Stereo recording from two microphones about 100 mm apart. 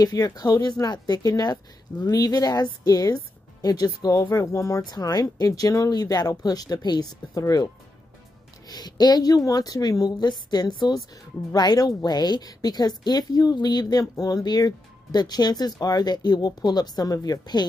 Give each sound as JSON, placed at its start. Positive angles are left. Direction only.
{"t": 0.0, "sound": "speech", "side_deg": 40}